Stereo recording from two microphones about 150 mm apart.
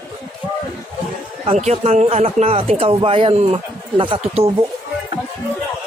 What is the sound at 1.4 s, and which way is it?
A man's voice, 45° right (ahead or behind).